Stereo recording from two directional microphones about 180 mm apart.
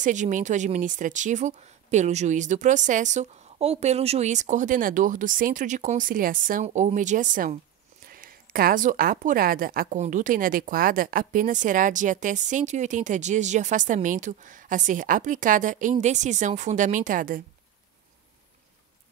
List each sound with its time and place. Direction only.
0.0 s a woman's voice: 45° right (ahead or behind)